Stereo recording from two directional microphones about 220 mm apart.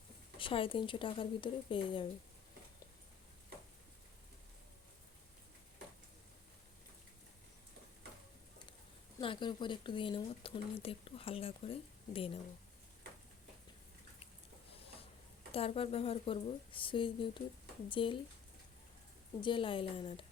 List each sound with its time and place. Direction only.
0.3 s speech: 25° left (ahead or behind)
9.1 s speech: 20° left (ahead or behind)
15.5 s speech: 25° left (ahead or behind)
19.4 s speech: 20° left (ahead or behind)